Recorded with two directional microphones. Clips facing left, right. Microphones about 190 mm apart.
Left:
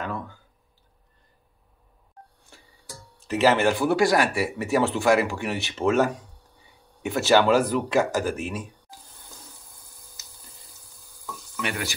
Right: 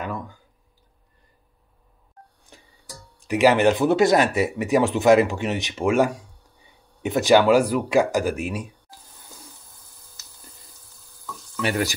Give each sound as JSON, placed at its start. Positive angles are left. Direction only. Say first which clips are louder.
{"t": 0.0, "sound": "a sound", "louder": "right 1 dB", "side_deg": -15}
{"t": 2.5, "sound": "music", "louder": "right 3 dB", "side_deg": -15}
{"t": 3.2, "sound": "speech", "louder": "right 3 dB", "side_deg": -15}